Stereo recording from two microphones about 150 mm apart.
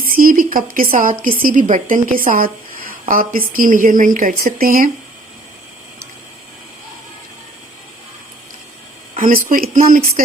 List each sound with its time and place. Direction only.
0.0 s a sound: 70° right (ahead or behind)
1.2 s speech: 70° right (ahead or behind)
9.1 s speech: 65° right (ahead or behind)